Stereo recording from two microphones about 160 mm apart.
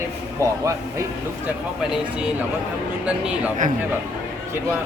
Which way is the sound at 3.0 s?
10° right (ahead or behind).